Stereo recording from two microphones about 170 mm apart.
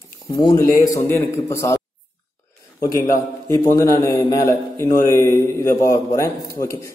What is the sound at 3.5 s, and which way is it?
A man's voice, 20° left (ahead or behind).